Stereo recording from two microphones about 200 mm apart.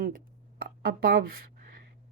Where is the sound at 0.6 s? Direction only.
50° right (ahead or behind).